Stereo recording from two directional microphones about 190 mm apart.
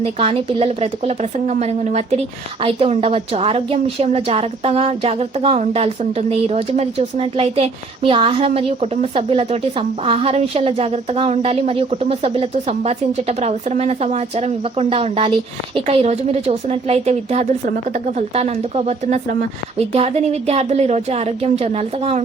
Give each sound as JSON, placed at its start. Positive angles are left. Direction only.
{"t": 0.0, "sound": "speech", "side_deg": -30}